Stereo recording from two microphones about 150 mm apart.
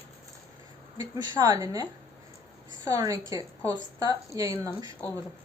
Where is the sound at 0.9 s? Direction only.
25° right (ahead or behind).